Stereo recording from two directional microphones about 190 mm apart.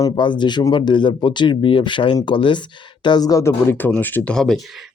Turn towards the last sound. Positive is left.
turn(degrees=0)  # may be behind; listen again after turning